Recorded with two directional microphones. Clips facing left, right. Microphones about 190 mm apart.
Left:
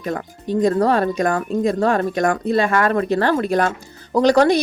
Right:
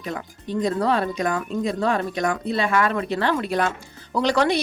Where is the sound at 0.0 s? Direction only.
45° left (ahead or behind).